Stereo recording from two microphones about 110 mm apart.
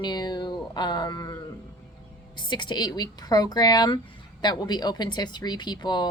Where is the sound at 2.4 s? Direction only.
45° left (ahead or behind).